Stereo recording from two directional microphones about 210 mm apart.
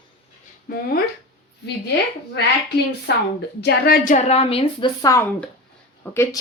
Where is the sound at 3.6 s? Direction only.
50° left (ahead or behind).